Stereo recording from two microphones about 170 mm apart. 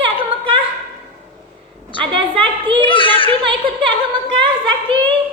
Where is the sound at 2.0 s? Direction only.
30° right (ahead or behind).